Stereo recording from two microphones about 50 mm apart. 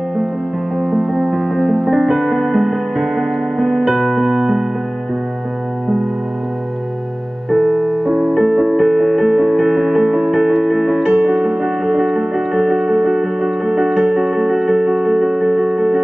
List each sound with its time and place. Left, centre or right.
0.7 s music: centre
7.5 s music: centre
8.5 s music: right
8.7 s music: centre